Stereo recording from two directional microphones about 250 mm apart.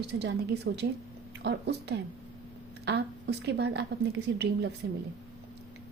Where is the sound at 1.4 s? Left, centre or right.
Right.